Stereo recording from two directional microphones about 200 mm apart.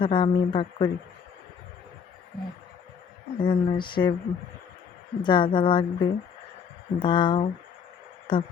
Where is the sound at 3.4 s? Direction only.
25° left (ahead or behind).